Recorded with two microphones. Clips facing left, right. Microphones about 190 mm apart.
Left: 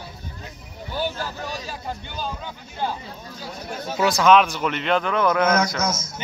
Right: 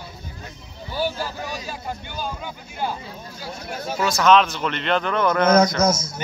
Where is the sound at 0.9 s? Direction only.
10° right (ahead or behind).